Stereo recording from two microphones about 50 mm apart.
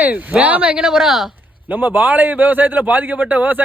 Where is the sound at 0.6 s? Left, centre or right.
Centre.